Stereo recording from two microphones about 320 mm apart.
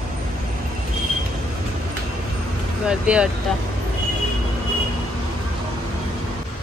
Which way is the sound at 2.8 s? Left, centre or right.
Centre.